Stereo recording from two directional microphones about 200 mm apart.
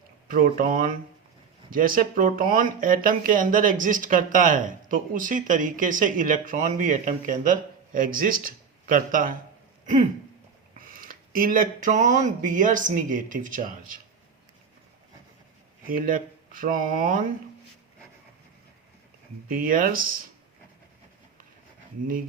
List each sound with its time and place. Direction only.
0.3 s speech: 45° right (ahead or behind)
9.8 s a sound: 40° right (ahead or behind)
10.8 s speech: 45° right (ahead or behind)
15.9 s speech: 45° right (ahead or behind)
19.5 s speech: 45° right (ahead or behind)